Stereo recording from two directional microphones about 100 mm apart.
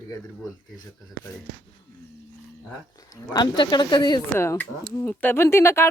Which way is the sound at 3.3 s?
45° left (ahead or behind).